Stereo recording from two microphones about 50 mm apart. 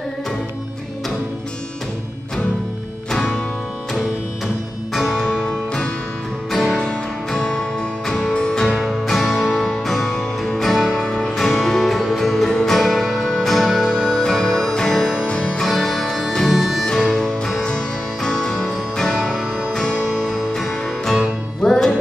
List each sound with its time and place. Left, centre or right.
6.5 s music: centre
6.8 s music: centre
9.0 s music: centre
16.8 s music: centre
19.1 s music: centre
19.7 s music: centre
21.6 s music: centre